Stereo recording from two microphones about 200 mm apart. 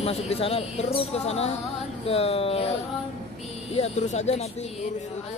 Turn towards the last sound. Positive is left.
turn(degrees=35)  # may be behind; listen again after turning